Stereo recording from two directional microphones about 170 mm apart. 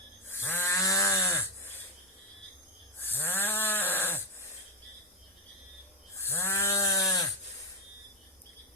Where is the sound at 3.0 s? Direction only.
15° left (ahead or behind).